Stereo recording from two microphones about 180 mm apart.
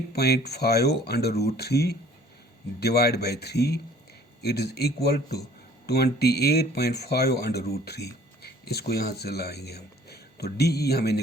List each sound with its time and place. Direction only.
0.1 s a man's voice: 60° left (ahead or behind)